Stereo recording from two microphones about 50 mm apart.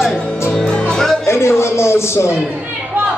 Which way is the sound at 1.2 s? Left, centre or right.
Left.